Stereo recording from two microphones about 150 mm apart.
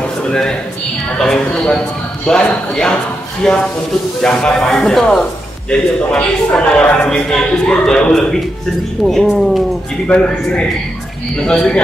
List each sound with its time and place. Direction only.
0.2 s a man's voice: 5° left (ahead or behind)